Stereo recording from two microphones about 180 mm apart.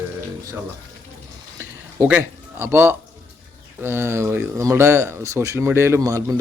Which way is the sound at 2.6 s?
15° right (ahead or behind).